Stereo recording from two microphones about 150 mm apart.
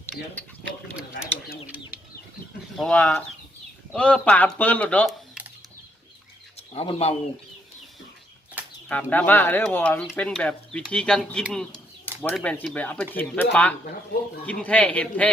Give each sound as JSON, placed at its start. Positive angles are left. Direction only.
{"t": 2.7, "sound": "speech", "side_deg": 5}
{"t": 6.7, "sound": "speech", "side_deg": 40}
{"t": 8.9, "sound": "speech", "side_deg": 10}